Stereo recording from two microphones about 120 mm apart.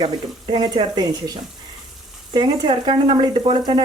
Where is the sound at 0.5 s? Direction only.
40° right (ahead or behind).